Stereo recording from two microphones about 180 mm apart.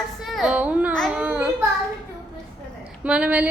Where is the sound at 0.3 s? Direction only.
Centre (ahead or behind).